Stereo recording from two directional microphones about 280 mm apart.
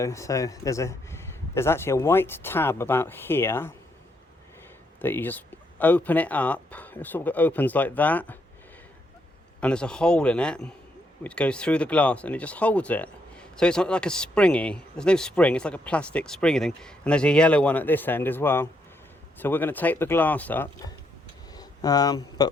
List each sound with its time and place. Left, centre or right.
0.0 s a man's voice: centre
4.9 s speech: centre
9.6 s a man's voice: centre
21.5 s a sound: centre